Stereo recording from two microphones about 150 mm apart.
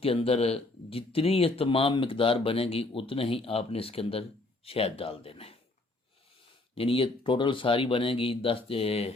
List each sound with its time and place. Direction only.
0.0 s speech: 40° left (ahead or behind)
6.7 s speech: 40° left (ahead or behind)